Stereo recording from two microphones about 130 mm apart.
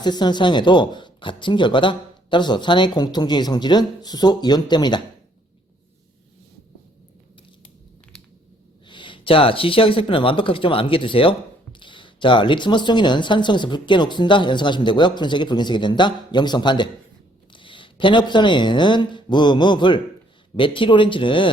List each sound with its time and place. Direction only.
0.0 s speech: 35° left (ahead or behind)
8.9 s speech: 40° left (ahead or behind)